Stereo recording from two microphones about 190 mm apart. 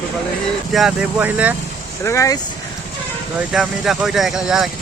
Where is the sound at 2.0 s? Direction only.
15° left (ahead or behind).